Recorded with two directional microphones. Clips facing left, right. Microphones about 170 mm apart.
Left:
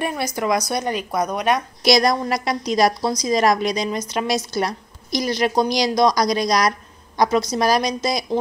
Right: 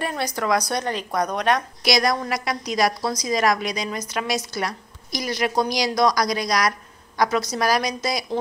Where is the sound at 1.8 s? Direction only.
25° left (ahead or behind).